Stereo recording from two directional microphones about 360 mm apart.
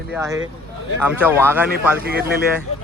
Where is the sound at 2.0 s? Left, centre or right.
Right.